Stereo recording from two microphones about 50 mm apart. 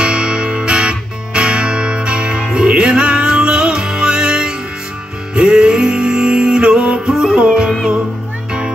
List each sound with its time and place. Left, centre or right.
0.0 s music: right